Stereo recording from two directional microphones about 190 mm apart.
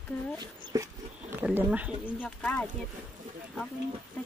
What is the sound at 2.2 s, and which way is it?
Speech, 5° left (ahead or behind).